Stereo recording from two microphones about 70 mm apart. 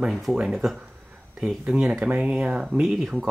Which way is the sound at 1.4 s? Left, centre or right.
Centre.